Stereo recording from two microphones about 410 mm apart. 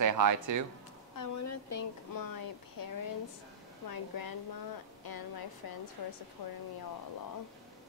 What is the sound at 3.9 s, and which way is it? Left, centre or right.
Speech, left.